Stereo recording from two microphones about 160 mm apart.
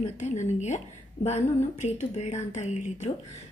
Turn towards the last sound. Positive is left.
turn(degrees=45)  # may be behind; listen again after turning